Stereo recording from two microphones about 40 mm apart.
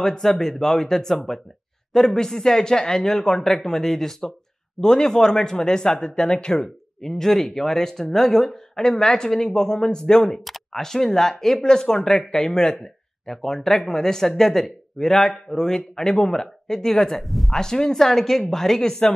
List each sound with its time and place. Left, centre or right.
0.0 s speech: centre
17.3 s speech: centre
17.6 s speech: centre